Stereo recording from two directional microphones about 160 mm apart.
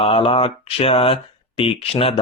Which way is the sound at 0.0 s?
35° left (ahead or behind).